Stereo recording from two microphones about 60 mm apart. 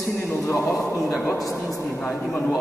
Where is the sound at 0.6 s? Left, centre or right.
Centre.